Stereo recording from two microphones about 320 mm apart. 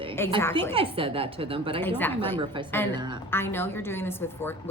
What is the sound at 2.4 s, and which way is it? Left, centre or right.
Speech, centre.